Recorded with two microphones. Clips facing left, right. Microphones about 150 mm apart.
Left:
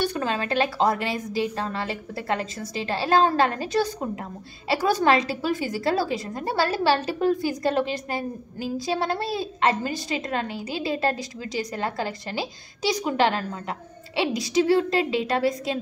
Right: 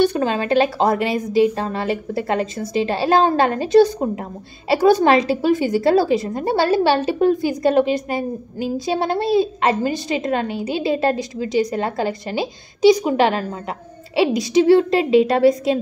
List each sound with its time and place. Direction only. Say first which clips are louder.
0.0 s a woman's voice: right 8 dB; 20° right (ahead or behind)